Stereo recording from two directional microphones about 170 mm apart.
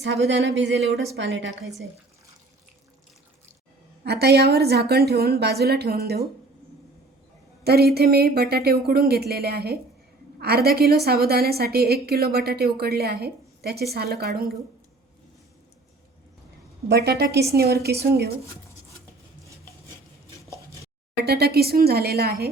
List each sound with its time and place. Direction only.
0.0 s speech: 90° right
4.0 s a woman's voice: 70° right (ahead or behind)
7.6 s a woman's voice: 70° right (ahead or behind)
16.9 s a woman's voice: 70° right (ahead or behind)
21.2 s a woman's voice: 70° right (ahead or behind)